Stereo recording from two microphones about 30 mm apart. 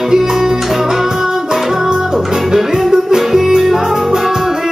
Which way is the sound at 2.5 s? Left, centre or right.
Centre.